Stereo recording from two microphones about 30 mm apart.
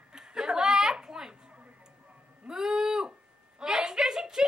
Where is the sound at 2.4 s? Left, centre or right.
Centre.